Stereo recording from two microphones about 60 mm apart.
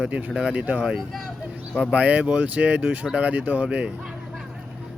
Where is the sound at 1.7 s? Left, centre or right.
Right.